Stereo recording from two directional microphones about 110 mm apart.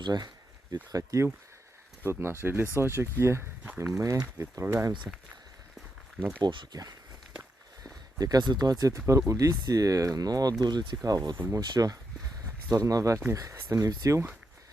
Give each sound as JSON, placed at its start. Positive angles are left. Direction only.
{"t": 0.0, "sound": "speech", "side_deg": -40}
{"t": 5.1, "sound": "speech", "side_deg": -15}
{"t": 6.4, "sound": "speech", "side_deg": -45}
{"t": 8.2, "sound": "speech", "side_deg": -40}
{"t": 11.3, "sound": "speech", "side_deg": -20}
{"t": 11.6, "sound": "speech", "side_deg": -35}